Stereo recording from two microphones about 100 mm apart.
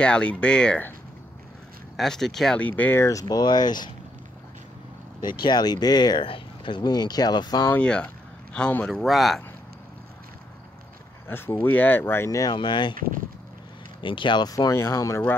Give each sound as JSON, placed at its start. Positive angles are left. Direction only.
{"t": 0.0, "sound": "speech", "side_deg": 10}
{"t": 2.0, "sound": "speech", "side_deg": 5}
{"t": 2.6, "sound": "speech", "side_deg": 15}
{"t": 5.2, "sound": "speech", "side_deg": 45}
{"t": 7.7, "sound": "speech", "side_deg": 10}
{"t": 11.2, "sound": "speech", "side_deg": 20}
{"t": 12.5, "sound": "speech", "side_deg": 50}
{"t": 14.0, "sound": "speech", "side_deg": 55}
{"t": 14.5, "sound": "speech", "side_deg": 30}